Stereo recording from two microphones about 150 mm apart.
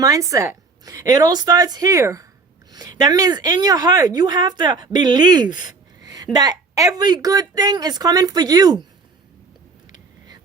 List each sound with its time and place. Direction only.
0.0 s speech: 20° right (ahead or behind)